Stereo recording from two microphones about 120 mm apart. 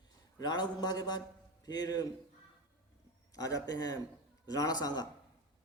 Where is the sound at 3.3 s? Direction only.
30° left (ahead or behind).